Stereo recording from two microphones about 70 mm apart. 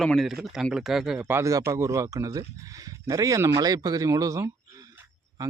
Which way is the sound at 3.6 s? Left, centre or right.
Right.